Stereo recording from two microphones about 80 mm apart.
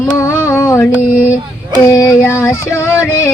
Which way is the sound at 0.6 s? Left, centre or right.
Left.